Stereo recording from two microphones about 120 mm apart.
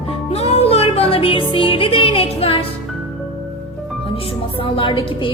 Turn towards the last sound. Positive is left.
turn(degrees=45)  # may be behind; listen again after turning